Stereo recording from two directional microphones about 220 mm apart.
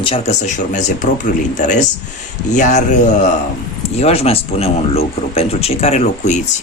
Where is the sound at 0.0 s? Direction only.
25° left (ahead or behind).